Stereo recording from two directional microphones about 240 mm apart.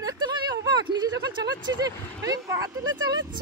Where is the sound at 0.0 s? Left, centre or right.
Centre.